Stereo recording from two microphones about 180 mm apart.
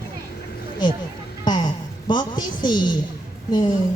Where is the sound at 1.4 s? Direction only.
25° left (ahead or behind).